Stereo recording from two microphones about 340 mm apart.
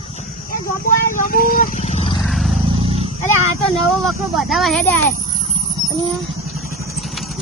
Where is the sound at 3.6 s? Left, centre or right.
Centre.